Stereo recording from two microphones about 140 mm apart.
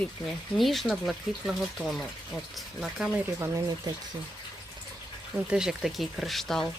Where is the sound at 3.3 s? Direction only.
20° right (ahead or behind).